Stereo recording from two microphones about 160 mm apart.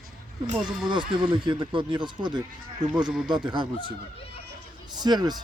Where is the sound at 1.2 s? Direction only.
30° right (ahead or behind).